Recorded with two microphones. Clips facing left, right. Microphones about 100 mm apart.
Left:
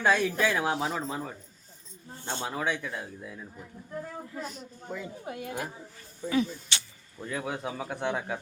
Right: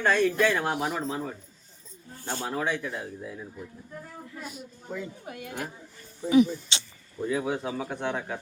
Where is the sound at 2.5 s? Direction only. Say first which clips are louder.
Right 3 dB; centre (ahead or behind).